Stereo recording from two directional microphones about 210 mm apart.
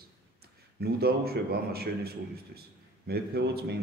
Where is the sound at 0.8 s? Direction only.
45° right (ahead or behind).